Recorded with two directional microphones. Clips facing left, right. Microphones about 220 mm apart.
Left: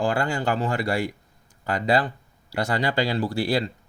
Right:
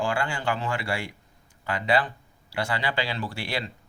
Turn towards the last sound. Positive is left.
turn(degrees=40)  # may be behind; listen again after turning